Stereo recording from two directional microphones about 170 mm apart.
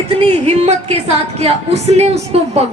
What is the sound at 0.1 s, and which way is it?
A woman's voice, 35° right (ahead or behind).